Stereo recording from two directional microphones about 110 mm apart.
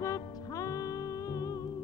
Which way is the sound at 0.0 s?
30° left (ahead or behind).